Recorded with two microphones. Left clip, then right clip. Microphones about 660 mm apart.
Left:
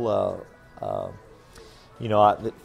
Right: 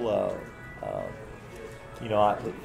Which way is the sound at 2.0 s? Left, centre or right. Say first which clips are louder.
Left 5 dB; left.